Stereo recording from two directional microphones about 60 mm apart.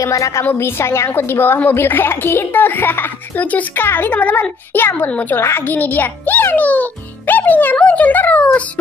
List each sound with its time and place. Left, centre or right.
0.0 s a woman's voice: left
0.5 s a woman's voice: left
3.3 s a woman's voice: left
7.7 s speech: left